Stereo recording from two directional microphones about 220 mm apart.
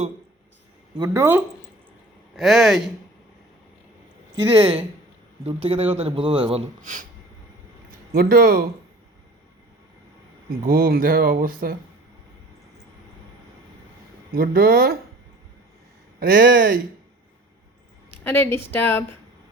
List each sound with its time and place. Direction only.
0.9 s speech: 15° right (ahead or behind)
2.3 s speech: centre (ahead or behind)
4.5 s speech: 25° right (ahead or behind)
6.8 s speech: 35° right (ahead or behind)
8.1 s speech: 40° right (ahead or behind)
10.5 s speech: 40° right (ahead or behind)
14.3 s speech: 40° right (ahead or behind)
16.2 s speech: 40° right (ahead or behind)
18.2 s speech: 10° left (ahead or behind)